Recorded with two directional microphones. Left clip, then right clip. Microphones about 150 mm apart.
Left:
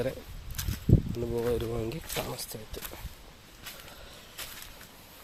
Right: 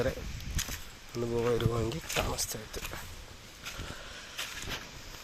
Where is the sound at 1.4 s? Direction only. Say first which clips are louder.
Right 1 dB; 15° left (ahead or behind).